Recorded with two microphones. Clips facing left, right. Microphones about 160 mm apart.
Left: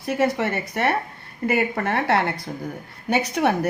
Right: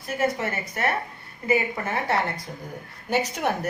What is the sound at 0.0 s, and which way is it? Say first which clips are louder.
A woman's voice: left 4 dB; 70° left (ahead or behind).